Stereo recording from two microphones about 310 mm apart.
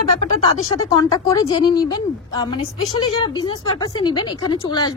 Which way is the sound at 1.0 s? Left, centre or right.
Centre.